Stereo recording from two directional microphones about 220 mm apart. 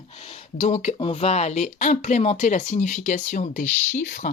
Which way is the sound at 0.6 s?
30° left (ahead or behind).